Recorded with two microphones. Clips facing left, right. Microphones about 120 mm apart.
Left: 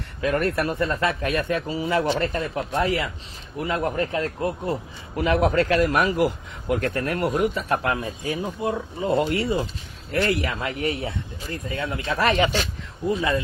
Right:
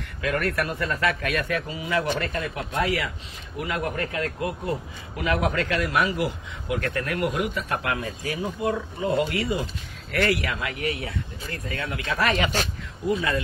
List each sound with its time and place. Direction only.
0.2 s speech: 25° left (ahead or behind)